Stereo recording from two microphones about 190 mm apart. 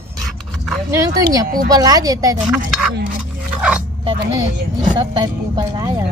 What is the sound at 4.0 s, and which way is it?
Speech, 25° right (ahead or behind).